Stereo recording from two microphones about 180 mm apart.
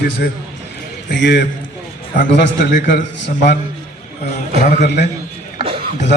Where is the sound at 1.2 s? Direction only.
70° left (ahead or behind).